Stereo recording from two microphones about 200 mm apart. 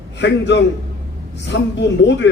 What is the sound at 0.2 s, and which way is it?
A man's voice, 60° left (ahead or behind).